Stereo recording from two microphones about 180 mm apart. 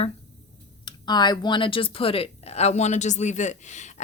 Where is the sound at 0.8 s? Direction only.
25° left (ahead or behind).